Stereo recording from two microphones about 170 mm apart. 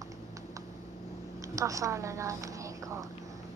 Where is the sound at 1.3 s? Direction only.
20° right (ahead or behind).